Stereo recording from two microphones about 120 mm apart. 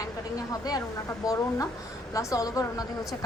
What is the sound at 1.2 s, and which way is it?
A woman's voice, 30° left (ahead or behind).